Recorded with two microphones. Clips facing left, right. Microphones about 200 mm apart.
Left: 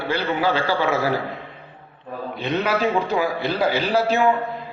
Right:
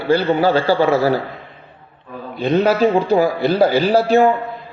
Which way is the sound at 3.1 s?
40° right (ahead or behind).